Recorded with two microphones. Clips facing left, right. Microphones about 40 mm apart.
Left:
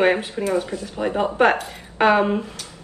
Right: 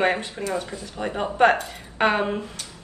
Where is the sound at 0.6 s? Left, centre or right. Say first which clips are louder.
Left 6 dB; left.